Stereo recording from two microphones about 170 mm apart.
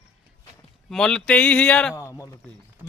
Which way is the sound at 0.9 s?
5° left (ahead or behind).